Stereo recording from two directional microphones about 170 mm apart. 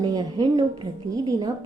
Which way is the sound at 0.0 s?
25° right (ahead or behind).